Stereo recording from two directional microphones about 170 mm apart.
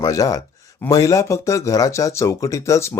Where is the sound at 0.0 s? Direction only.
20° left (ahead or behind).